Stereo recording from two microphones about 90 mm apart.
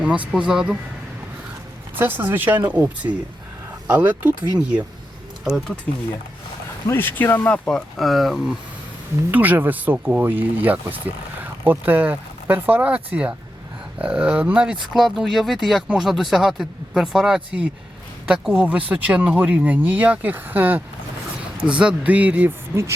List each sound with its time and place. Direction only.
0.3 s speech: 10° right (ahead or behind)
2.0 s speech: 20° right (ahead or behind)
5.5 s speech: 5° right (ahead or behind)
6.8 s speech: 25° left (ahead or behind)
7.7 s speech: centre (ahead or behind)
9.3 s speech: 20° right (ahead or behind)
22.7 s speech: 30° right (ahead or behind)